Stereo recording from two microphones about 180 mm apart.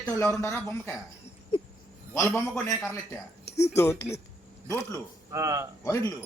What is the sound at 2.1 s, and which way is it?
Speech, 15° left (ahead or behind).